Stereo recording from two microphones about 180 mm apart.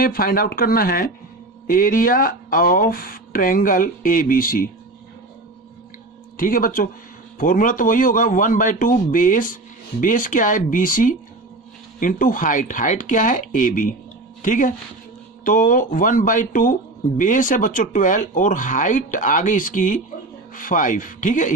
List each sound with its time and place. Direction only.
0.0 s a man's voice: 55° left (ahead or behind)
6.3 s a man's voice: 50° left (ahead or behind)